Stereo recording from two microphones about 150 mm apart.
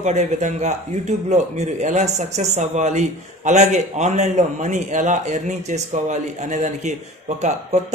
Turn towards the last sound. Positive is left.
turn(degrees=-50)  # may be behind; listen again after turning